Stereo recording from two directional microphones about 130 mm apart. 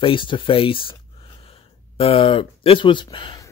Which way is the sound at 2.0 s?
45° left (ahead or behind).